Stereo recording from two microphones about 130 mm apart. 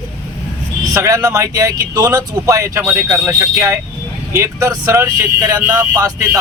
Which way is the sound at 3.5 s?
20° right (ahead or behind).